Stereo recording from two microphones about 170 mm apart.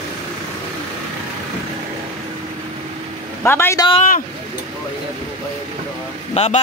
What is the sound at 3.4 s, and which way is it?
Speech, 15° left (ahead or behind).